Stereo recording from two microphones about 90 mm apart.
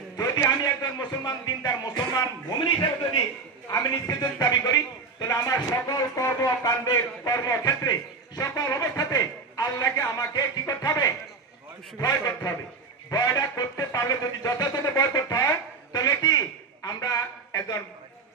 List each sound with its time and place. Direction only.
0.2 s a sound: 40° left (ahead or behind)
1.8 s speech: 45° left (ahead or behind)
3.6 s a man's voice: 40° left (ahead or behind)